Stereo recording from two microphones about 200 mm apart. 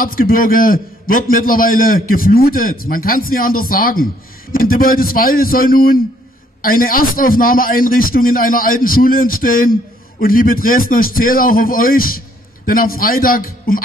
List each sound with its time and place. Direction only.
0.0 s a man's voice: 45° left (ahead or behind)